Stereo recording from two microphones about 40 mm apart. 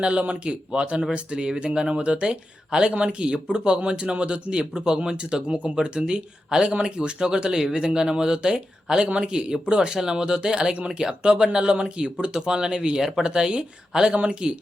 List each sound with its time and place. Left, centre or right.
0.0 s speech: right